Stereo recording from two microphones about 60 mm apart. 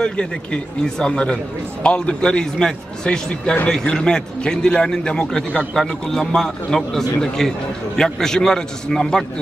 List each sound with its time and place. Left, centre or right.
0.0 s a man's voice: centre